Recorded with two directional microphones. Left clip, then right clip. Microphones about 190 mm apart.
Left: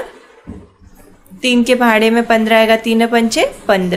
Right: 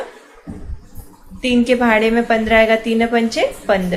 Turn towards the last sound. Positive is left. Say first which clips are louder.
# left 3 dB
turn(degrees=30)  # may be behind; listen again after turning